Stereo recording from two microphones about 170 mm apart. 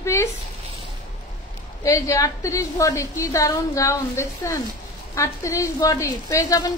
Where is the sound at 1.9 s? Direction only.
20° left (ahead or behind).